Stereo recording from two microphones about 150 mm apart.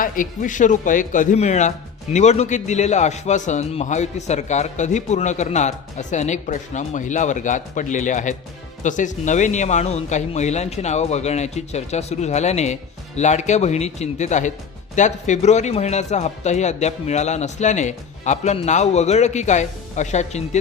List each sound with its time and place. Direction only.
0.0 s a man's voice: 60° left (ahead or behind)